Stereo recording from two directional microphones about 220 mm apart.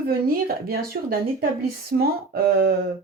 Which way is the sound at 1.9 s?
45° right (ahead or behind).